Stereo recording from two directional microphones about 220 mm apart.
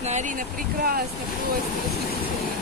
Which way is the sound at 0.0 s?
35° right (ahead or behind).